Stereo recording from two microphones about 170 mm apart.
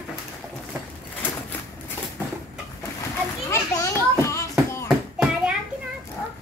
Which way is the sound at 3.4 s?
15° left (ahead or behind).